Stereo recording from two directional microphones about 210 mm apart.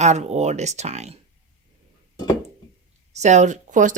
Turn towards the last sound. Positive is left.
turn(degrees=-35)  # may be behind; listen again after turning